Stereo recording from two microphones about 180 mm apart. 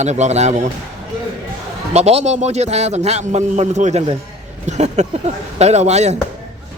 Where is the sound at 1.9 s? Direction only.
35° right (ahead or behind).